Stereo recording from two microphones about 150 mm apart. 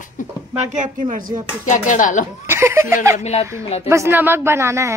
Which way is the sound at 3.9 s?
15° right (ahead or behind).